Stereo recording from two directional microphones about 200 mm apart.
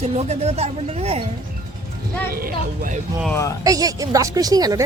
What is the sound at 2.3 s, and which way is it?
Speech, 45° right (ahead or behind).